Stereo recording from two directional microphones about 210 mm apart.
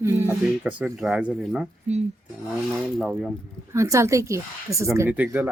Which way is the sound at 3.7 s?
15° right (ahead or behind).